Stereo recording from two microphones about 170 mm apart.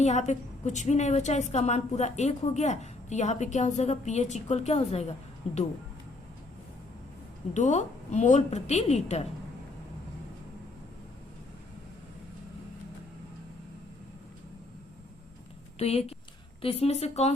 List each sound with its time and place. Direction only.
0.0 s a woman's voice: 40° left (ahead or behind)
7.5 s a woman's voice: 45° left (ahead or behind)
15.8 s speech: 35° left (ahead or behind)